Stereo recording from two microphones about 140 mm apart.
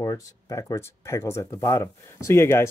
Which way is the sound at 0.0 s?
25° left (ahead or behind).